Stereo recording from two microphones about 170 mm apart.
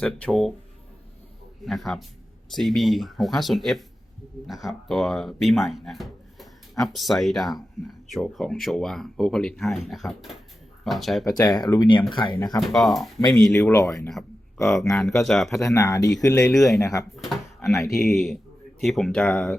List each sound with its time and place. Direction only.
0.0 s speech: 5° left (ahead or behind)
1.6 s speech: centre (ahead or behind)
11.3 s speech: 25° left (ahead or behind)
12.5 s speech: centre (ahead or behind)
13.7 s speech: 15° left (ahead or behind)
14.8 s speech: centre (ahead or behind)
15.5 s speech: 20° left (ahead or behind)
16.6 s speech: centre (ahead or behind)
16.8 s speech: 20° left (ahead or behind)
18.1 s speech: centre (ahead or behind)